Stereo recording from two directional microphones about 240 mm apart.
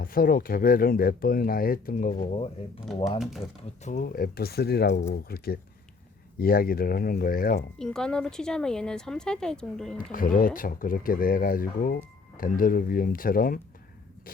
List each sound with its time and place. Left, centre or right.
0.0 s speech: left
2.8 s speech: centre
3.8 s speech: left
6.4 s speech: left
7.8 s speech: centre
10.1 s speech: left